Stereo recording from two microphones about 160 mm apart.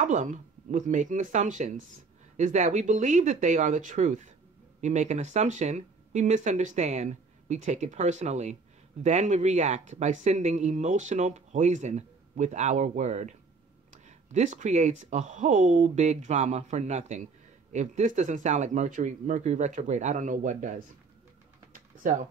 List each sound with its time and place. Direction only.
0.0 s speech: 50° right (ahead or behind)